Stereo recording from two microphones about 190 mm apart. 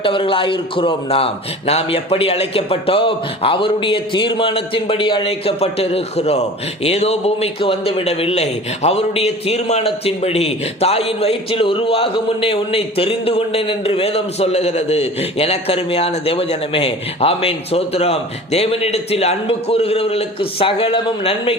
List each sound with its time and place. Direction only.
0.0 s a man's voice: 25° left (ahead or behind)